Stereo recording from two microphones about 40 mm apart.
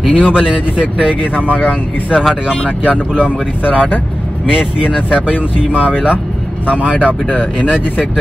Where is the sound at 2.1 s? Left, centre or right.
Centre.